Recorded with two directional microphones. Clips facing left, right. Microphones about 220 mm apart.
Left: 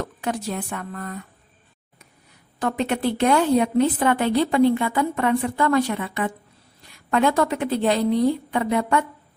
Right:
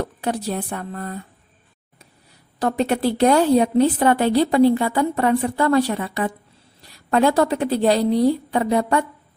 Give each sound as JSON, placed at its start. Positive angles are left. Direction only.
{"t": 0.0, "sound": "a woman's voice", "side_deg": -35}
{"t": 2.6, "sound": "a woman's voice", "side_deg": -35}